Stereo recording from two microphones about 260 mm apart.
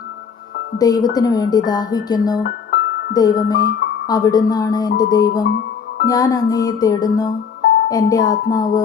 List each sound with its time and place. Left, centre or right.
0.8 s music: centre
2.4 s music: left
3.1 s music: centre
5.4 s music: left
6.1 s music: centre